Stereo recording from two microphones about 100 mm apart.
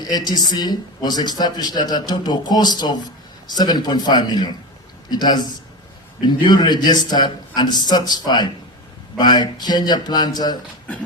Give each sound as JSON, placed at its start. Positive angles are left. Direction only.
{"t": 0.3, "sound": "speech", "side_deg": 45}